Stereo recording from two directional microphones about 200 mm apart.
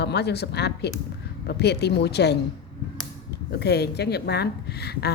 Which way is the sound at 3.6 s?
55° left (ahead or behind).